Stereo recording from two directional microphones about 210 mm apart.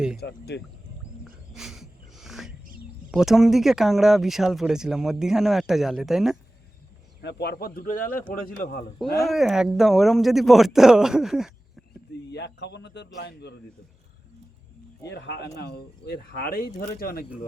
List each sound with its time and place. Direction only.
0.2 s speech: 50° left (ahead or behind)
1.2 s dog: centre (ahead or behind)
3.1 s speech: centre (ahead or behind)
7.2 s speech: 50° left (ahead or behind)
9.2 s speech: centre (ahead or behind)
12.3 s a man's voice: 55° left (ahead or behind)
15.0 s speech: 55° left (ahead or behind)